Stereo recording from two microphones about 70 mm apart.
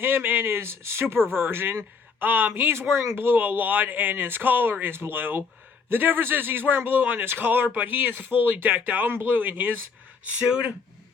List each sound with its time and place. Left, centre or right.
0.0 s a man's voice: right
10.2 s speech: centre